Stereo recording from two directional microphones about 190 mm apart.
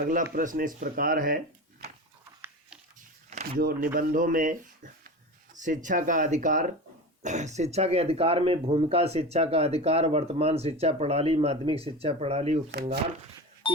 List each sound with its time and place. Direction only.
0.3 s speech: 45° right (ahead or behind)
3.2 s a sound: 35° right (ahead or behind)
3.6 s speech: 50° right (ahead or behind); by 12.5 s 35° right (ahead or behind)
12.7 s speech: 55° right (ahead or behind)
13.6 s telephone dialing: 25° left (ahead or behind)